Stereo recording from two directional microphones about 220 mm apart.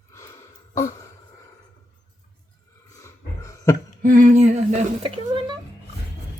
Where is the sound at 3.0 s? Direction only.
15° left (ahead or behind).